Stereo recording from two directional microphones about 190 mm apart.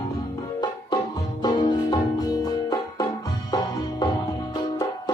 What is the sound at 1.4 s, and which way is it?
Music, 20° left (ahead or behind).